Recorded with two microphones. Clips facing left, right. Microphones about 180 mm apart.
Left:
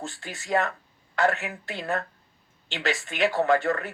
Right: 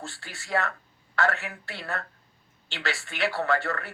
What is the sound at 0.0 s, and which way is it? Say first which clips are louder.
A man's voice: left 4 dB; 20° left (ahead or behind).